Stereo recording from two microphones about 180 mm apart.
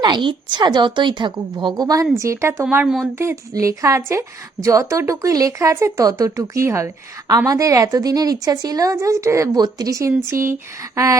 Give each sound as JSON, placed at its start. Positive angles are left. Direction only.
{"t": 0.0, "sound": "a woman's voice", "side_deg": -25}
{"t": 2.6, "sound": "speech", "side_deg": -5}
{"t": 3.2, "sound": "a woman's voice", "side_deg": -15}